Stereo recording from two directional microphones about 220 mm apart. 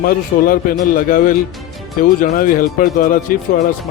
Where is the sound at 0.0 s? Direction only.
40° left (ahead or behind).